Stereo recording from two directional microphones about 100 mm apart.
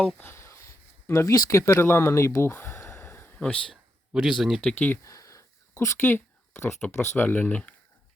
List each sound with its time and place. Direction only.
0.2 s a sound: 25° left (ahead or behind)
3.7 s speech: centre (ahead or behind)
4.6 s speech: 15° left (ahead or behind)
5.0 s speech: 30° left (ahead or behind); by 7.7 s 15° left (ahead or behind)